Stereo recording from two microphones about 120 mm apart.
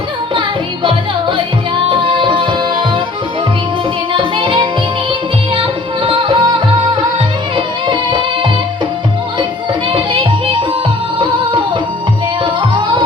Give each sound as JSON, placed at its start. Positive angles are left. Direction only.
{"t": 1.9, "sound": "music", "side_deg": -45}
{"t": 4.1, "sound": "music", "side_deg": -45}
{"t": 9.9, "sound": "music", "side_deg": -45}
{"t": 12.7, "sound": "music", "side_deg": -45}